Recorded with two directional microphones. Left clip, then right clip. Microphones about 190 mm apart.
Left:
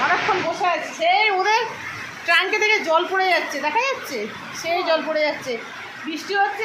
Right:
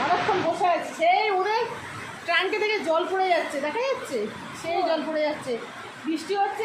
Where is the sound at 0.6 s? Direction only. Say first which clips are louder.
Left 2 dB; 5° right (ahead or behind).